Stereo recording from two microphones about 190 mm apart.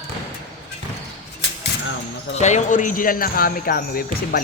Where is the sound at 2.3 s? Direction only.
40° left (ahead or behind).